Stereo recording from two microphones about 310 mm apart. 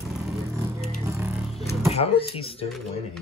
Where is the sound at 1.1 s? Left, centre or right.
Centre.